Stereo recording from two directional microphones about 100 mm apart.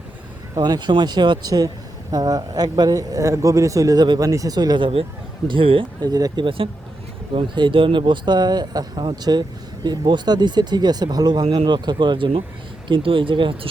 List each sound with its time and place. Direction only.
0.5 s speech: 40° right (ahead or behind)
5.5 s speech: 60° right (ahead or behind)
6.1 s speech: 40° right (ahead or behind)
6.4 s speech: 60° right (ahead or behind)